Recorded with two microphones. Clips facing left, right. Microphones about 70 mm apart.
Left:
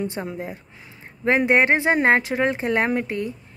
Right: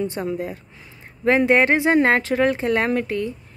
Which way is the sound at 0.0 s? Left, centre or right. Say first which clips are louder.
Right 3 dB; left.